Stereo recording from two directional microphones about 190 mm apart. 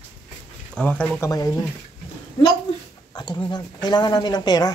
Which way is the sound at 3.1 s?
20° left (ahead or behind).